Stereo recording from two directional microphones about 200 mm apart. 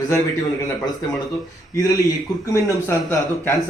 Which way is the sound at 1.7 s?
15° left (ahead or behind).